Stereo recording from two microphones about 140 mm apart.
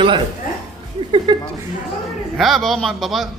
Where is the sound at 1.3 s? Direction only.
30° right (ahead or behind).